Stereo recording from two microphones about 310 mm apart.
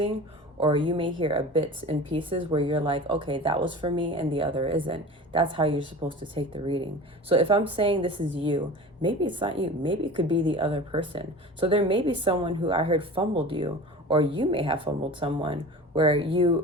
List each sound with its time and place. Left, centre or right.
0.6 s speech: centre